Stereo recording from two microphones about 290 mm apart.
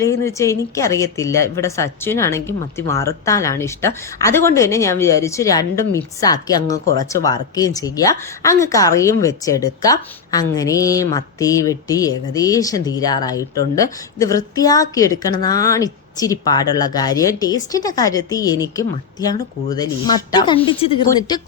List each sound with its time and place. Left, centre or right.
0.0 s a woman's voice: centre